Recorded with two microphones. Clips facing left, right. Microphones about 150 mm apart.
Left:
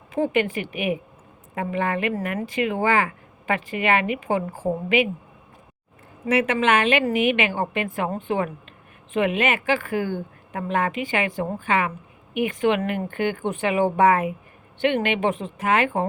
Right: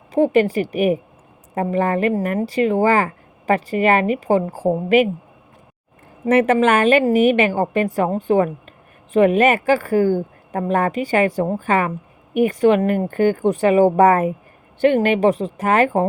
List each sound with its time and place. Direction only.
0.1 s a woman's voice: 35° right (ahead or behind)
6.2 s a woman's voice: 45° right (ahead or behind)